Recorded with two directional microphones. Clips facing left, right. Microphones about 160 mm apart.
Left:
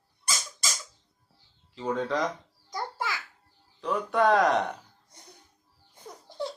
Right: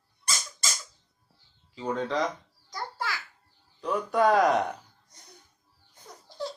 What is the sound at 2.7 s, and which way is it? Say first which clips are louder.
Babbling: left 2 dB; 20° left (ahead or behind).